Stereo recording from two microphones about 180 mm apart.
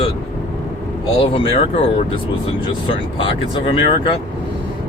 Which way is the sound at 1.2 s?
30° left (ahead or behind).